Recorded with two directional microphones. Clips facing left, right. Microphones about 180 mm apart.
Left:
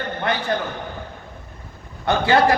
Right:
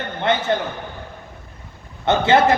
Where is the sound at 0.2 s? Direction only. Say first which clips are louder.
Right 5 dB; 25° right (ahead or behind).